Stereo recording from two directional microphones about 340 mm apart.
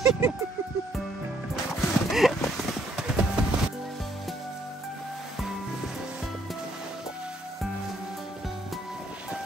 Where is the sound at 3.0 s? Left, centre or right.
Centre.